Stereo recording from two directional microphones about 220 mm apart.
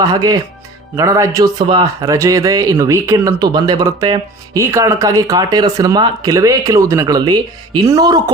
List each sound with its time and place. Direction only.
0.0 s a man's voice: 15° right (ahead or behind)